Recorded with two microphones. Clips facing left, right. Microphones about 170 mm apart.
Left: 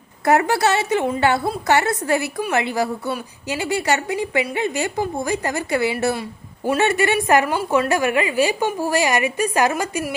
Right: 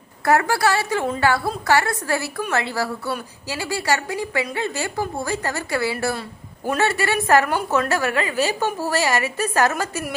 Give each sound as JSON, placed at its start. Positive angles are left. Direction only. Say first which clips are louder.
{"t": 0.3, "sound": "a woman's voice", "louder": "left 2 dB", "side_deg": 20}